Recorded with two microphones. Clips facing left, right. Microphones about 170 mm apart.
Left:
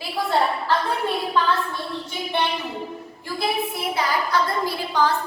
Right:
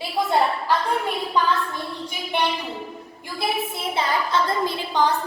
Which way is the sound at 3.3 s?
25° right (ahead or behind).